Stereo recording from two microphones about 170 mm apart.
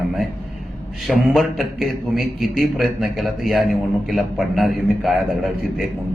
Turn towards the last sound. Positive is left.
turn(degrees=0)  # may be behind; listen again after turning